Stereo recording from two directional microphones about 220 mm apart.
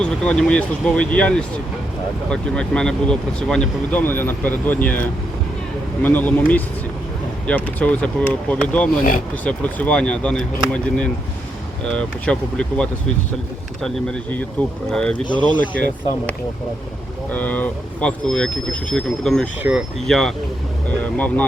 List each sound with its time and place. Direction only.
0.0 s speech: 5° left (ahead or behind)
15.4 s speech: 20° right (ahead or behind)
17.3 s speech: 5° left (ahead or behind)